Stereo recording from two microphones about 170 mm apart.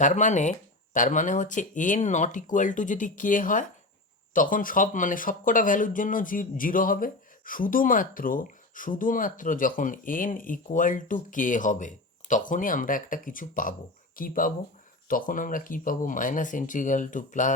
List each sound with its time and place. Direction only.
0.0 s speech: 45° left (ahead or behind)